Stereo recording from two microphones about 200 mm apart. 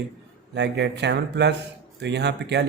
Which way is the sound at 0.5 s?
60° right (ahead or behind).